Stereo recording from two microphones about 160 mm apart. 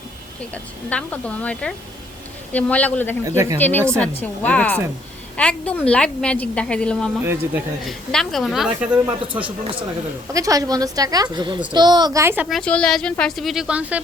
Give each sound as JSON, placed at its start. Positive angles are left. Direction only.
{"t": 0.5, "sound": "a woman's voice", "side_deg": 10}
{"t": 3.2, "sound": "a woman's voice", "side_deg": -20}
{"t": 3.6, "sound": "a woman's voice", "side_deg": 10}
{"t": 7.2, "sound": "speech", "side_deg": -15}
{"t": 7.9, "sound": "a woman's voice", "side_deg": 0}
{"t": 10.3, "sound": "a woman's voice", "side_deg": -20}
{"t": 12.5, "sound": "a woman's voice", "side_deg": 5}